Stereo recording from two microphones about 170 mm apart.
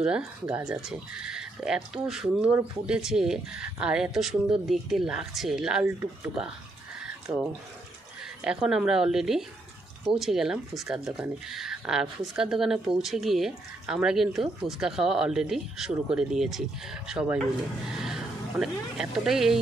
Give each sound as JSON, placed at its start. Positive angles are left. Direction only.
{"t": 0.0, "sound": "speech", "side_deg": -5}
{"t": 7.0, "sound": "a sound", "side_deg": -5}
{"t": 8.5, "sound": "speech", "side_deg": -5}